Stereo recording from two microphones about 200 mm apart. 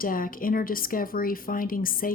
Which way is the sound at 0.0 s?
45° left (ahead or behind).